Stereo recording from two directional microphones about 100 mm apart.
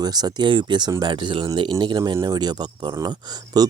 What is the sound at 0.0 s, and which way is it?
Speech, 40° right (ahead or behind).